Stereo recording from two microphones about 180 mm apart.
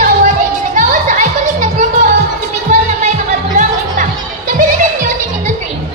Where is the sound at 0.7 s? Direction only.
45° right (ahead or behind).